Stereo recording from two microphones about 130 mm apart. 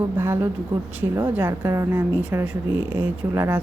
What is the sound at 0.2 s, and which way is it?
A woman's voice, 15° right (ahead or behind).